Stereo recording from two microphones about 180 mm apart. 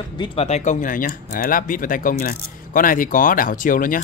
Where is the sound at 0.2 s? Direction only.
35° left (ahead or behind).